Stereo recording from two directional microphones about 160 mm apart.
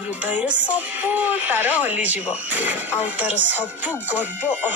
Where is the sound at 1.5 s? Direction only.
10° right (ahead or behind).